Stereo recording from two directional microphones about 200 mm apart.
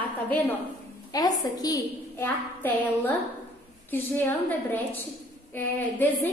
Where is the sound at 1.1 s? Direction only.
20° left (ahead or behind).